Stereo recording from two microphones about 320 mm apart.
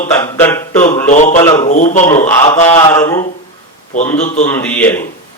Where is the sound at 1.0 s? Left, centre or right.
Left.